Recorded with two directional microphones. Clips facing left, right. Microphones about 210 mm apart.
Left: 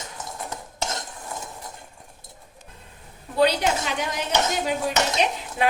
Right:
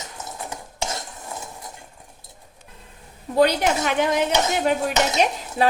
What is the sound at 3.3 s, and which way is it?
Speech, 55° right (ahead or behind).